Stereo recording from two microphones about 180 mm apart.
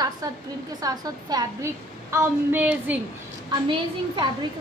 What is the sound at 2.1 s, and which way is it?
Speech, 10° right (ahead or behind).